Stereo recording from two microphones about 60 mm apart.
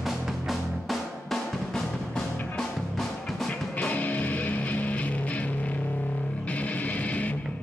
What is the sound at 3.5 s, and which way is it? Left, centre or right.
Music, left.